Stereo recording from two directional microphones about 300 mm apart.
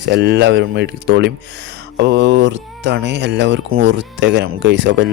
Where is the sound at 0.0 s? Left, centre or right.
Right.